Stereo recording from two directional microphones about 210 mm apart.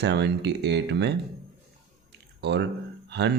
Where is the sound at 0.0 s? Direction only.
55° right (ahead or behind).